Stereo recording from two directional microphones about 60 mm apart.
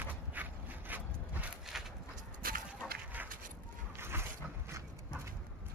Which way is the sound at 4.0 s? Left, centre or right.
Right.